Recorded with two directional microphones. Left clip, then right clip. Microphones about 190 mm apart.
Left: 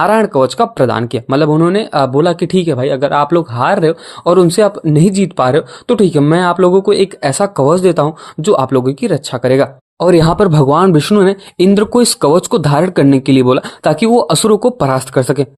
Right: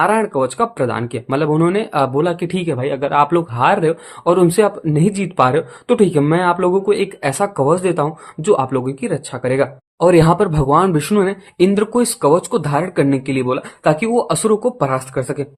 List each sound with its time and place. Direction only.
0.0 s speech: 40° left (ahead or behind)
1.5 s speech: 25° left (ahead or behind); by 15.4 s 50° left (ahead or behind)